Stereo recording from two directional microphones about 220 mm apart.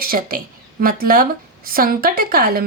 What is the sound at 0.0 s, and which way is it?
A woman's voice, 40° right (ahead or behind).